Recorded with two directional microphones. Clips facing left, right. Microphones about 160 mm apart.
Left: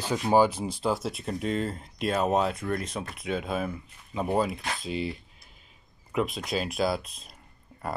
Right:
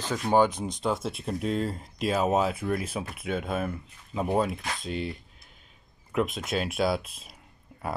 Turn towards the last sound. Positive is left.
turn(degrees=0)  # may be behind; listen again after turning